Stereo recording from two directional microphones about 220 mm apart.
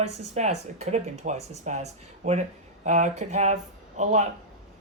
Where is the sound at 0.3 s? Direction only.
30° right (ahead or behind).